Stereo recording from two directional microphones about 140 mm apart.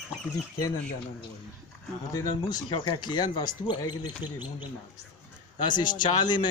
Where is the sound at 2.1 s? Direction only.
25° left (ahead or behind).